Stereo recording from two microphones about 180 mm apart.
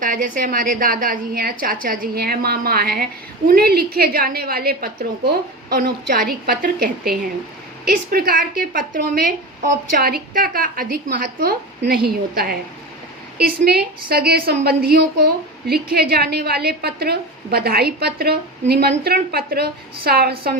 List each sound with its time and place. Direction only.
0.0 s a woman's voice: 50° right (ahead or behind)